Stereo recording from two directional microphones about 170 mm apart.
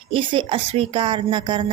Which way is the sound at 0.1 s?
30° right (ahead or behind).